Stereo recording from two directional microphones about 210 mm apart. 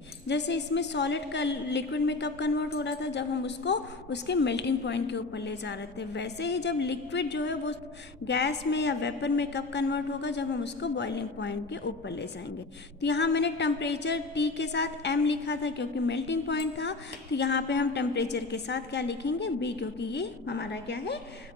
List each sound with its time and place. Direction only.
0.3 s a woman's voice: 55° left (ahead or behind)